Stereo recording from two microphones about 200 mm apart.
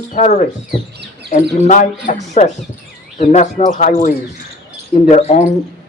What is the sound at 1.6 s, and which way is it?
Speech, 40° left (ahead or behind).